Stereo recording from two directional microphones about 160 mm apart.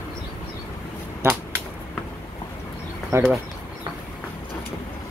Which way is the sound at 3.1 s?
20° right (ahead or behind).